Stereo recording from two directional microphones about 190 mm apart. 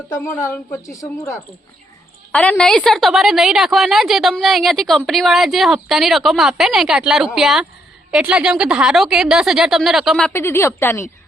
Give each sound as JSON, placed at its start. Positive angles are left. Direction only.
{"t": 0.4, "sound": "a woman's voice", "side_deg": 15}